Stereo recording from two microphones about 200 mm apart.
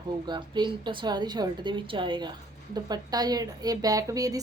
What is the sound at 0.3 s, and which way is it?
A woman's voice, 25° right (ahead or behind).